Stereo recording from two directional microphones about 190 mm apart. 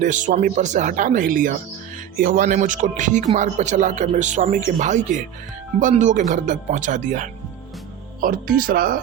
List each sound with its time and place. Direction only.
0.0 s speech: 40° right (ahead or behind)